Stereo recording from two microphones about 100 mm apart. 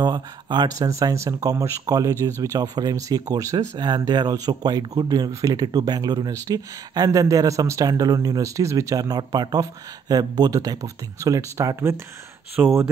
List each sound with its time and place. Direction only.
0.0 s speech: 45° right (ahead or behind)
0.7 s speech: 35° right (ahead or behind)
2.6 s speech: 40° right (ahead or behind)
3.5 s speech: 45° right (ahead or behind); by 12.9 s 25° right (ahead or behind)